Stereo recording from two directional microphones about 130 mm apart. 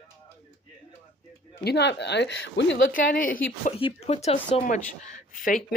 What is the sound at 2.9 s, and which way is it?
Speech, 90° left.